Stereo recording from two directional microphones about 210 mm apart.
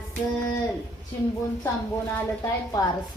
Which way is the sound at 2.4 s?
15° left (ahead or behind).